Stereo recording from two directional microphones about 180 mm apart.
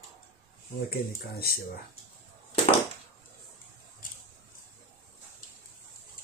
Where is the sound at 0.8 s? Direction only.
60° left (ahead or behind).